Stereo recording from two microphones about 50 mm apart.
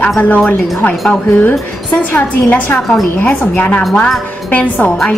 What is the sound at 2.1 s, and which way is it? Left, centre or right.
A woman's voice, left.